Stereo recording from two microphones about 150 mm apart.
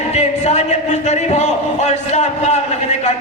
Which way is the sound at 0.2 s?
45° left (ahead or behind).